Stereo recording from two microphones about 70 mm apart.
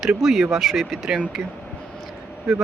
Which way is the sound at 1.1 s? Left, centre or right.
Centre.